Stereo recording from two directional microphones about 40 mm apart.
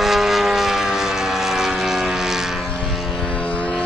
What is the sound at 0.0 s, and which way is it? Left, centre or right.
Vehicle, centre.